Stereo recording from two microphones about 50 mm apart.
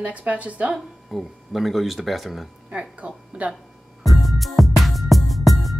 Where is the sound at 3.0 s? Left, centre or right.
Right.